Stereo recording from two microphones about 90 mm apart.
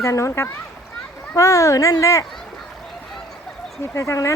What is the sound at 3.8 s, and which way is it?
Speech, 35° left (ahead or behind).